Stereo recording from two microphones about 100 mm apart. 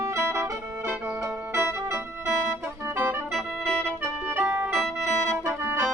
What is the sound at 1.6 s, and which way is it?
Music, 25° right (ahead or behind).